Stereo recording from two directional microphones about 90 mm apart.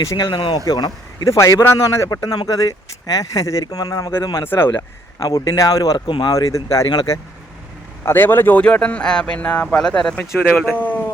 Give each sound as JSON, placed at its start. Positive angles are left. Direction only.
{"t": 0.0, "sound": "speech", "side_deg": 35}
{"t": 0.3, "sound": "speech", "side_deg": 70}
{"t": 0.6, "sound": "speech", "side_deg": 50}
{"t": 1.3, "sound": "speech", "side_deg": 35}
{"t": 2.3, "sound": "speech", "side_deg": 45}
{"t": 4.4, "sound": "a man's voice", "side_deg": 25}
{"t": 4.7, "sound": "speech", "side_deg": 35}
{"t": 6.1, "sound": "speech", "side_deg": 60}
{"t": 6.3, "sound": "speech", "side_deg": 40}
{"t": 6.8, "sound": "speech", "side_deg": 50}
{"t": 8.0, "sound": "a man's voice", "side_deg": 25}
{"t": 8.6, "sound": "a man's voice", "side_deg": 10}